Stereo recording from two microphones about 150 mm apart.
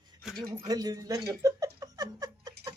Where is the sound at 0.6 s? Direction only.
25° right (ahead or behind).